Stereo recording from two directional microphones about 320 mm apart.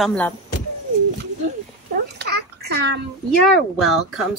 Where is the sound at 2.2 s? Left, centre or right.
Right.